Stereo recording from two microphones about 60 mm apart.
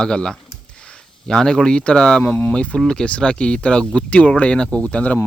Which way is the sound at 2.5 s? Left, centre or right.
Centre.